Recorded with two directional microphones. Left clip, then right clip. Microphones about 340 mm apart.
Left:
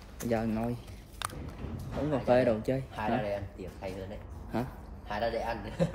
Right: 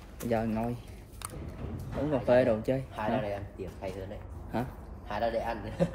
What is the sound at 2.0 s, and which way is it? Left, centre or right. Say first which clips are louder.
Speech: right 1 dB; centre.